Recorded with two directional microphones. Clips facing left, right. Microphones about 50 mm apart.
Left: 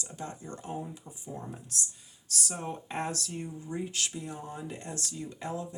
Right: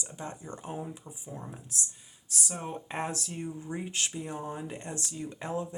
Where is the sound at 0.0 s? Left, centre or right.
Right.